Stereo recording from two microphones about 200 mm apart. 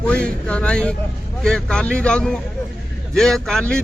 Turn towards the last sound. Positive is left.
turn(degrees=5)  # may be behind; listen again after turning